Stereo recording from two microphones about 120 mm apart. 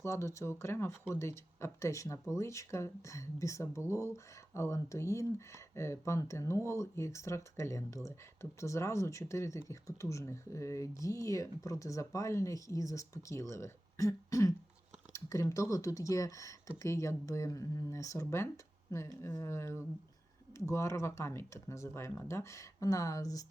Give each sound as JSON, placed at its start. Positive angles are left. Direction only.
{"t": 0.0, "sound": "speech", "side_deg": 25}